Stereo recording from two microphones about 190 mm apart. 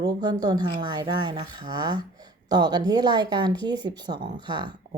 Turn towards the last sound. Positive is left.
turn(degrees=-25)  # may be behind; listen again after turning